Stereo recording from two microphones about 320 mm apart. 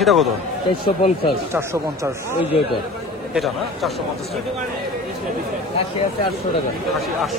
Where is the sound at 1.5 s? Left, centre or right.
Centre.